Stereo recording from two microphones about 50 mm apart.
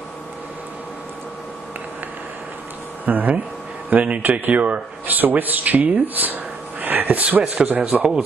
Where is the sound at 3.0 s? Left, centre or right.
Right.